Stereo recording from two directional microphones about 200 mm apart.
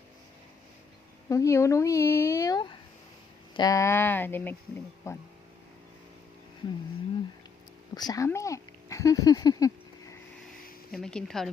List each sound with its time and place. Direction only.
1.3 s a woman's voice: 15° left (ahead or behind)
7.9 s speech: 20° left (ahead or behind)
10.9 s speech: centre (ahead or behind)